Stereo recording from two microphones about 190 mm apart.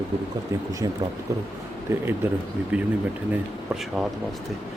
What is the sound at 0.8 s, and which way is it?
Speech, 20° right (ahead or behind).